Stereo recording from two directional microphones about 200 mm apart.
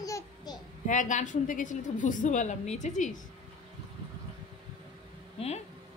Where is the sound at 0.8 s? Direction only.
40° left (ahead or behind).